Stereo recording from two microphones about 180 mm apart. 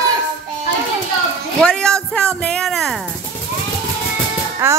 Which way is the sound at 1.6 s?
5° left (ahead or behind).